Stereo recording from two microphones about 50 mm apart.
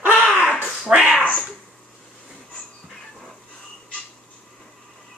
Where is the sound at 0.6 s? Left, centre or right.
Centre.